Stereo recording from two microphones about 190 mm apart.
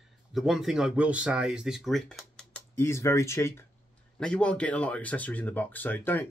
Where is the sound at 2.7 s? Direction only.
15° left (ahead or behind).